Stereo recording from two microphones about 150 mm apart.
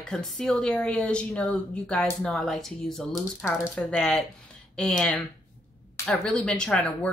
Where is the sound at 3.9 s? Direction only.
Centre (ahead or behind).